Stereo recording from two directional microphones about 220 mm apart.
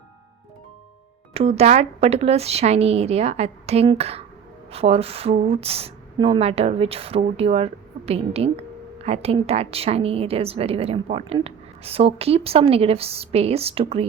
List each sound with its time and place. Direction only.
1.3 s a woman's voice: 25° right (ahead or behind)